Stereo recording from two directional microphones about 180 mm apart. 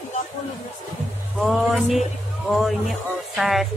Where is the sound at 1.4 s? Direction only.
Centre (ahead or behind).